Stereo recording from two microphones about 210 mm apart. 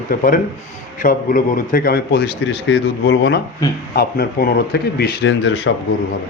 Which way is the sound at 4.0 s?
45° left (ahead or behind).